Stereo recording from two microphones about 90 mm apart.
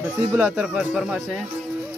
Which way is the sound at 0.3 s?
15° right (ahead or behind).